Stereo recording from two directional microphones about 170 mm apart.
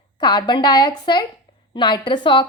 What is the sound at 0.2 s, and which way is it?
A woman's voice, 25° left (ahead or behind).